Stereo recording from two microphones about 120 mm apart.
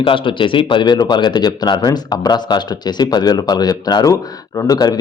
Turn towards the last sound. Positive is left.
turn(degrees=30)  # may be behind; listen again after turning